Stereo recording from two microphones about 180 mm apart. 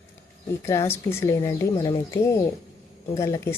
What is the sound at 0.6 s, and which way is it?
Speech, 15° left (ahead or behind).